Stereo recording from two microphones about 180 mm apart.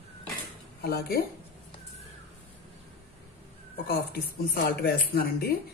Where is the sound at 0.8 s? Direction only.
60° left (ahead or behind).